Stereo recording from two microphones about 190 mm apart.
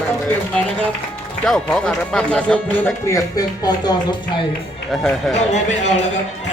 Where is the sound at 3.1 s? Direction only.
20° left (ahead or behind).